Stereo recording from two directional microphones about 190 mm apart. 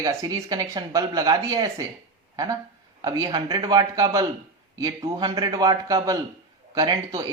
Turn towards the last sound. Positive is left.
turn(degrees=-20)  # may be behind; listen again after turning